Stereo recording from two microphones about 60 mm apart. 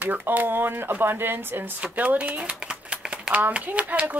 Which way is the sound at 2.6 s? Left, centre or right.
Centre.